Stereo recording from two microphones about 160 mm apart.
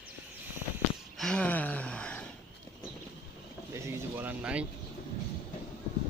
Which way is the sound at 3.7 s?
15° right (ahead or behind).